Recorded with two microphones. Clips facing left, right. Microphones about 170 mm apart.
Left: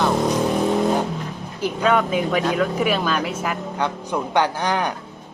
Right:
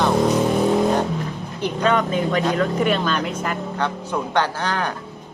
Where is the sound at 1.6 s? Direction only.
5° left (ahead or behind).